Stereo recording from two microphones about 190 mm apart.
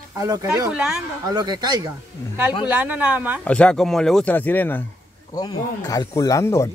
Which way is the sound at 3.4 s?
5° left (ahead or behind).